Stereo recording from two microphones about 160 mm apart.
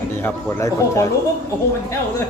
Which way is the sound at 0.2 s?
20° left (ahead or behind).